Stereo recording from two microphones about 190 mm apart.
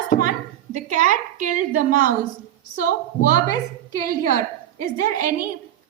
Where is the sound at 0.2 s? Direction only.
45° right (ahead or behind).